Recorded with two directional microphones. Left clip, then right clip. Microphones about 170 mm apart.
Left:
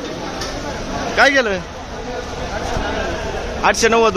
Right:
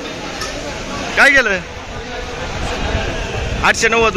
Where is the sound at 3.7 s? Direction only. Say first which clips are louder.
Even; 20° left (ahead or behind).